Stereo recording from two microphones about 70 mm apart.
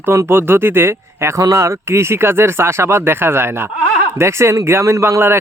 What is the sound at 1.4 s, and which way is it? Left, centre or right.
Speech, right.